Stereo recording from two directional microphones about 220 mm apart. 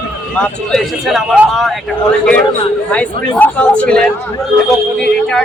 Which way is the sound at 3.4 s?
5° left (ahead or behind).